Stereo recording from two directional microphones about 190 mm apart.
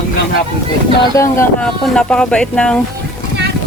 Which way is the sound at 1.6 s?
5° left (ahead or behind).